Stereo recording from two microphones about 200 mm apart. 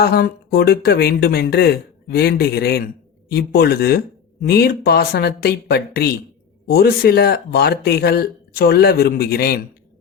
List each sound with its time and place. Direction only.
0.0 s speech: 50° left (ahead or behind)